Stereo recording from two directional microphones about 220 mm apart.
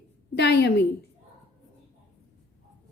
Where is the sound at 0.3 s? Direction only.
50° left (ahead or behind).